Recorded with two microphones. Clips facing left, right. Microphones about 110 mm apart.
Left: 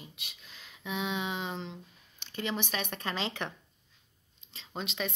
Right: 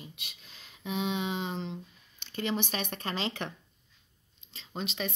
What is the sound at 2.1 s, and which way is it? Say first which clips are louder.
Speech: right 3 dB; 15° left (ahead or behind).